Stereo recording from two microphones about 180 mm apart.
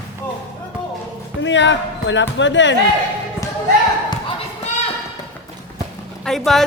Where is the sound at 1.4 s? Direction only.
90° left.